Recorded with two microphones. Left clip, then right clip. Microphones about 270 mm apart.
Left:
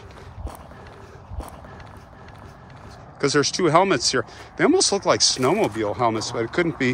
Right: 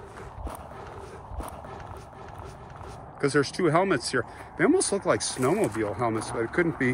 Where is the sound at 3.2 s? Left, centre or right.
Centre.